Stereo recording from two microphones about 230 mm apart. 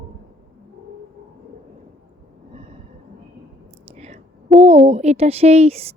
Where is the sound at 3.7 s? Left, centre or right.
Right.